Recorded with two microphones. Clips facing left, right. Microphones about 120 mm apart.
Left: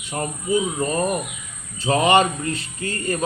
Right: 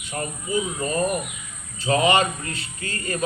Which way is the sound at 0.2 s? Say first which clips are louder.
Left 3 dB; 30° left (ahead or behind).